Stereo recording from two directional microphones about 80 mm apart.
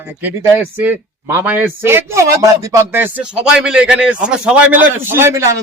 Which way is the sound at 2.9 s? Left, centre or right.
Right.